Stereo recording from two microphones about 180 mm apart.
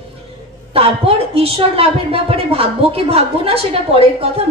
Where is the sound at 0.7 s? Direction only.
30° right (ahead or behind).